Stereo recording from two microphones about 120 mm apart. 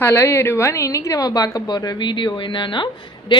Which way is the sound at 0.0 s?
20° left (ahead or behind).